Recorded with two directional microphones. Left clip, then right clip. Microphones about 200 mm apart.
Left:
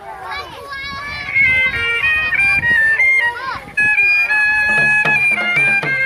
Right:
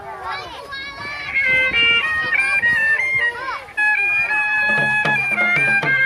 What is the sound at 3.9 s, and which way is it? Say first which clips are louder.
Music: left 4 dB; 5° right (ahead or behind).